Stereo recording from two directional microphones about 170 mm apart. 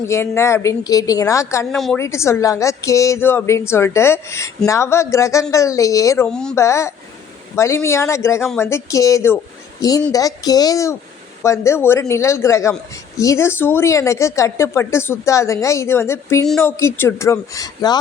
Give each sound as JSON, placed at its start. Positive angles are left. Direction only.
{"t": 0.1, "sound": "a woman's voice", "side_deg": 15}
{"t": 1.7, "sound": "speech", "side_deg": 0}
{"t": 2.0, "sound": "a woman's voice", "side_deg": 15}
{"t": 6.2, "sound": "speech", "side_deg": 5}
{"t": 6.6, "sound": "a woman's voice", "side_deg": 15}